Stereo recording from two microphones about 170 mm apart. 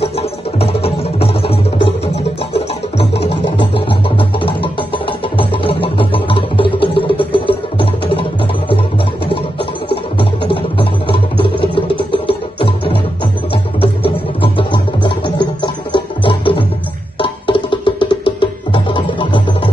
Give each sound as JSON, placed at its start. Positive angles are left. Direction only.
{"t": 0.0, "sound": "music", "side_deg": 35}